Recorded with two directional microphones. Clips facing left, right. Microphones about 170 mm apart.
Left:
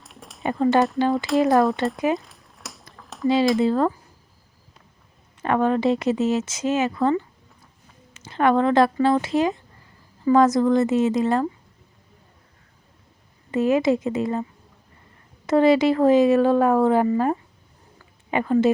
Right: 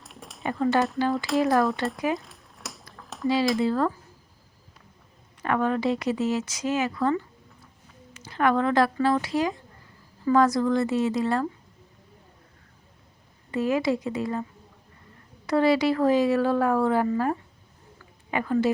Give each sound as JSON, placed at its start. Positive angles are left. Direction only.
{"t": 0.0, "sound": "a sound", "side_deg": 0}
{"t": 0.4, "sound": "speech", "side_deg": 20}
{"t": 2.1, "sound": "a sound", "side_deg": 0}
{"t": 3.6, "sound": "speech", "side_deg": 25}
{"t": 5.4, "sound": "speech", "side_deg": 25}
{"t": 13.5, "sound": "speech", "side_deg": 20}
{"t": 15.4, "sound": "speech", "side_deg": 20}